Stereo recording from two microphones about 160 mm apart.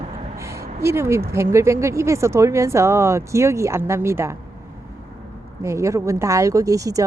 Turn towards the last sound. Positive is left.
turn(degrees=-20)  # may be behind; listen again after turning